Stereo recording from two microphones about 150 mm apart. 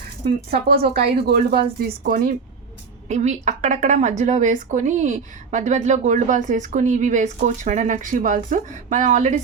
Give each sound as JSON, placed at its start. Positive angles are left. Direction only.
{"t": 0.3, "sound": "speech", "side_deg": -90}
{"t": 3.1, "sound": "a woman's voice", "side_deg": -50}